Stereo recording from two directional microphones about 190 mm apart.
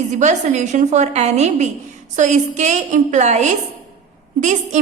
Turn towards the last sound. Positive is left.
turn(degrees=-40)  # may be behind; listen again after turning